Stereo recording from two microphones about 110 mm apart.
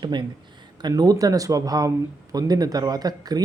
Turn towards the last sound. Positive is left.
turn(degrees=-35)  # may be behind; listen again after turning